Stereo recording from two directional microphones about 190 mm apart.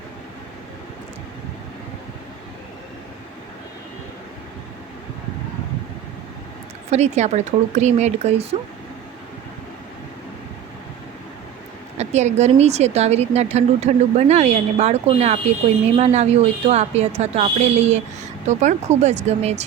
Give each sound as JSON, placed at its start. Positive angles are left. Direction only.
{"t": 6.9, "sound": "a woman's voice", "side_deg": -35}
{"t": 11.9, "sound": "a woman's voice", "side_deg": -35}